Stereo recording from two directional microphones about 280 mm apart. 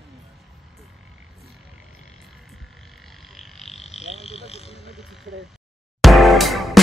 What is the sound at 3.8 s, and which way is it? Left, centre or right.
Speech, left.